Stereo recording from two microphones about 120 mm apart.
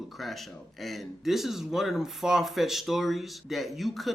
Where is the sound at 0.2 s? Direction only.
Centre (ahead or behind).